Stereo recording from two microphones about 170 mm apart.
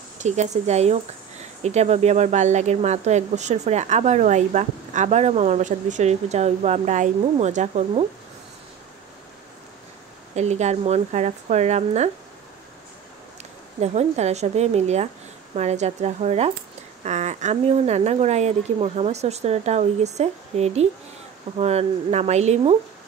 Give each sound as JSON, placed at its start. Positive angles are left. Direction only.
{"t": 0.2, "sound": "a woman's voice", "side_deg": -40}
{"t": 10.3, "sound": "speech", "side_deg": -40}
{"t": 13.7, "sound": "speech", "side_deg": -40}